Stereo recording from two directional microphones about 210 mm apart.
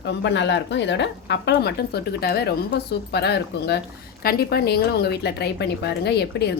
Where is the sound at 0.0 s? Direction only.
55° left (ahead or behind).